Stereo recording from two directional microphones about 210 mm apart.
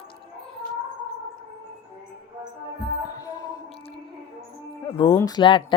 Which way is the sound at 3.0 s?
15° left (ahead or behind).